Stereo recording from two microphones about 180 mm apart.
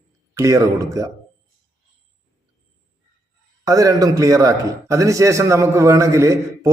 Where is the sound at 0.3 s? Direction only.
20° right (ahead or behind).